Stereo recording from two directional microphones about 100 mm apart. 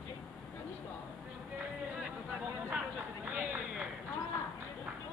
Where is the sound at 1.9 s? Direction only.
5° right (ahead or behind).